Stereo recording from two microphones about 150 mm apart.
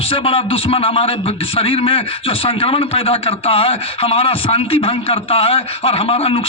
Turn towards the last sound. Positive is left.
turn(degrees=40)  # may be behind; listen again after turning